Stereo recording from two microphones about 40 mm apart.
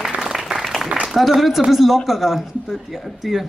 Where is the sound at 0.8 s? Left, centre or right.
Right.